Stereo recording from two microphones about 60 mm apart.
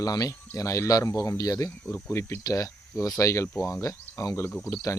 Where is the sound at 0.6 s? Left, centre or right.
Left.